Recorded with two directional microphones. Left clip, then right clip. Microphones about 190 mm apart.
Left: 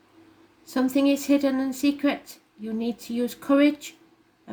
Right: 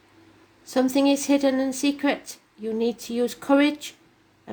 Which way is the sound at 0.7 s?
40° right (ahead or behind).